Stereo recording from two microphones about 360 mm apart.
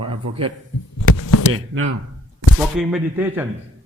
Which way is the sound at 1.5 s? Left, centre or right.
Right.